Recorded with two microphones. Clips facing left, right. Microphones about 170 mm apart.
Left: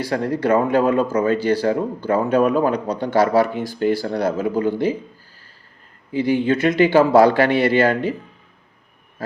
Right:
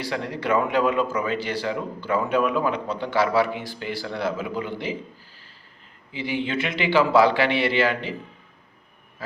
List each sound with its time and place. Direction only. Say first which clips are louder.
0.0 s speech: left 7 dB; 45° left (ahead or behind)
6.1 s speech: left 9 dB; 45° left (ahead or behind)